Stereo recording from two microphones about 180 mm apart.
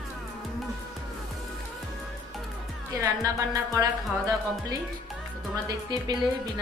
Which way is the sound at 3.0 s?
20° right (ahead or behind).